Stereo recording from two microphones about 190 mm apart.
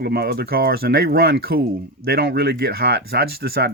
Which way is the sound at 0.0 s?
55° right (ahead or behind).